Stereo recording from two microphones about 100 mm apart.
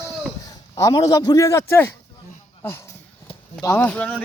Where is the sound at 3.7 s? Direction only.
15° left (ahead or behind).